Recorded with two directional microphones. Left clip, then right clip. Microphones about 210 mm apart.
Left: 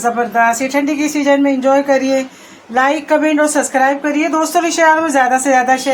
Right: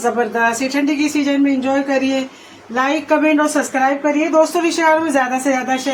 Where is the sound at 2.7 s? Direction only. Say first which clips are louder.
Left 3 dB; 30° left (ahead or behind).